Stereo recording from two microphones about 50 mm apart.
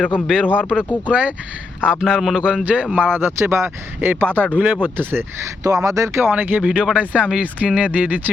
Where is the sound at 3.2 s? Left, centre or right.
Right.